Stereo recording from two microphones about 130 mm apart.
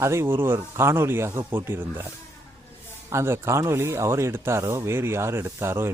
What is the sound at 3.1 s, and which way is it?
A man's voice, 20° right (ahead or behind).